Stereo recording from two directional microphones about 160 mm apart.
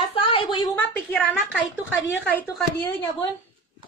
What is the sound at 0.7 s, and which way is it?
Speech, 10° left (ahead or behind).